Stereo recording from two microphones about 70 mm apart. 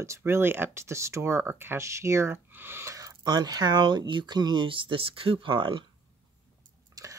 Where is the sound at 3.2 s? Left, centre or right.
Right.